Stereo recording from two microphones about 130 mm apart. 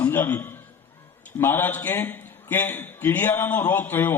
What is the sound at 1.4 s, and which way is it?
A man's voice, 15° left (ahead or behind).